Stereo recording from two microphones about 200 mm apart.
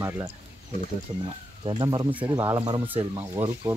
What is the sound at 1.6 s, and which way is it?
Speech, 25° right (ahead or behind).